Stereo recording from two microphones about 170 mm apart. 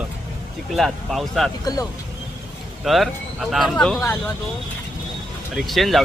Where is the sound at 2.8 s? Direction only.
Centre (ahead or behind).